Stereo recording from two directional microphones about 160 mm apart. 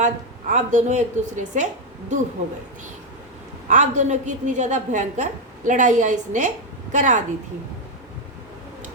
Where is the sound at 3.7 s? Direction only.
50° right (ahead or behind).